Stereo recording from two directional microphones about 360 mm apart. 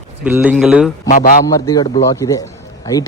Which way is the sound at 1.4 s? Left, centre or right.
Centre.